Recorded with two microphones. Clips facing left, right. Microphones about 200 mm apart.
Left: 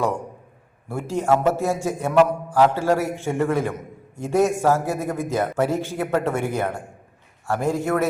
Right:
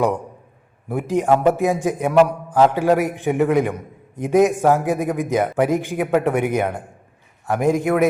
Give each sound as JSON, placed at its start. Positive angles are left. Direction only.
{"t": 0.9, "sound": "a man's voice", "side_deg": -20}